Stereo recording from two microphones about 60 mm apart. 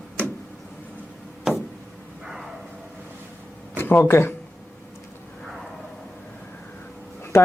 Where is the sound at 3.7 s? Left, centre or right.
Left.